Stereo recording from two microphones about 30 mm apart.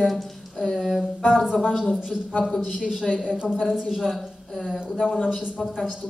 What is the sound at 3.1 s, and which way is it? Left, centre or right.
Speech, left.